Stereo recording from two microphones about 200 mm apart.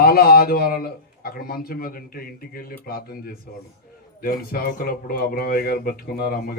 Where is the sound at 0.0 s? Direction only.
50° left (ahead or behind).